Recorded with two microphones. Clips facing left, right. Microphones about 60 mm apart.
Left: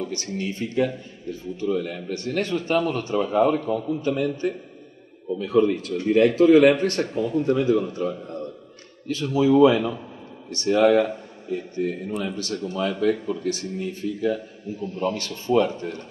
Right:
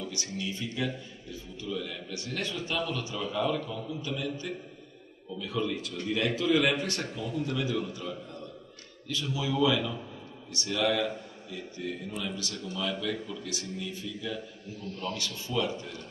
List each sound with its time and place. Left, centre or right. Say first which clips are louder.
0.0 s a man's voice: left 7 dB; left
5.4 s a man's voice: left 12 dB; left
14.8 s a man's voice: left 10 dB; centre
15.1 s a man's voice: left 11 dB; left